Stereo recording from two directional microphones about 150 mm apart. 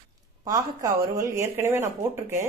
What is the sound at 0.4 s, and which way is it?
Speech, 25° right (ahead or behind).